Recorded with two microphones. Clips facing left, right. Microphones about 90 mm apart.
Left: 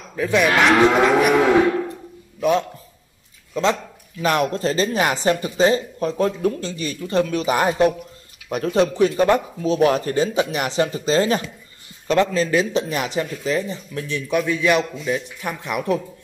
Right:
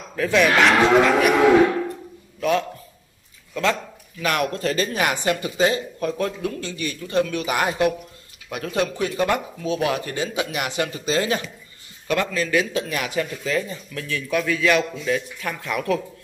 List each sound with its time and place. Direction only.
0.1 s speech: 10° left (ahead or behind)
4.2 s speech: 30° left (ahead or behind)